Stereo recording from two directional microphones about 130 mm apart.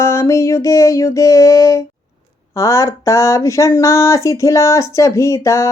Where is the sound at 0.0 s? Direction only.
20° left (ahead or behind).